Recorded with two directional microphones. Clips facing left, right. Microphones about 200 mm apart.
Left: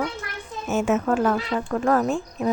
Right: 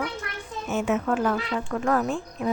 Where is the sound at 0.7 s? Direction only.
45° left (ahead or behind).